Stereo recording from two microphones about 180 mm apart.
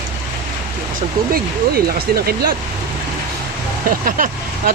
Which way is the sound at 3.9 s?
50° right (ahead or behind).